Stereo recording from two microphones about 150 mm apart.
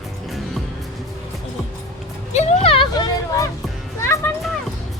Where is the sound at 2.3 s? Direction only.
45° left (ahead or behind); by 4.3 s 15° left (ahead or behind).